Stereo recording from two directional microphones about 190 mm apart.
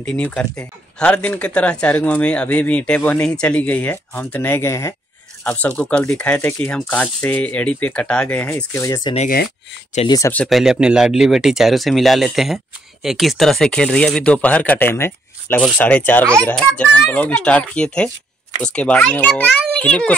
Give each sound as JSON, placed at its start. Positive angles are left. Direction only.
{"t": 0.0, "sound": "speech", "side_deg": 5}
{"t": 10.3, "sound": "speech", "side_deg": 5}